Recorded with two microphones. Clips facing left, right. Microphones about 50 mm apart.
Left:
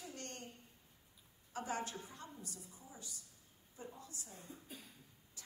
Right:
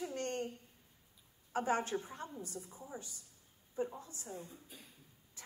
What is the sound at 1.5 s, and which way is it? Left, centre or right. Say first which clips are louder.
A woman's voice: right 8 dB; right.